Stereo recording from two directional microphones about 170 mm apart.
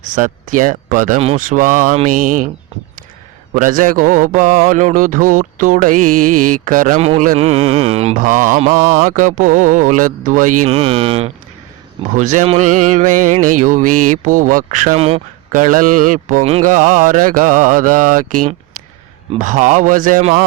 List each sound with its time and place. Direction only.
0.0 s mantra: 50° right (ahead or behind)
3.5 s mantra: 50° right (ahead or behind)
7.0 s speech: 40° right (ahead or behind)
7.3 s mantra: 40° right (ahead or behind)
12.1 s mantra: 45° right (ahead or behind)
15.5 s mantra: 50° right (ahead or behind)
16.4 s speech: 35° right (ahead or behind)
16.6 s mantra: 50° right (ahead or behind)